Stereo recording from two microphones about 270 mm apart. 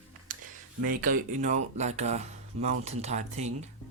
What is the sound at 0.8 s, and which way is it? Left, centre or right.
Speech, right.